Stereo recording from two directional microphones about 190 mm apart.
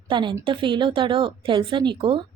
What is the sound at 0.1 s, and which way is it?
Speech, 25° right (ahead or behind).